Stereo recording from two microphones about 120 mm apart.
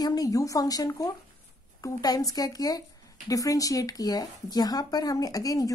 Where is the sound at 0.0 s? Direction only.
30° left (ahead or behind).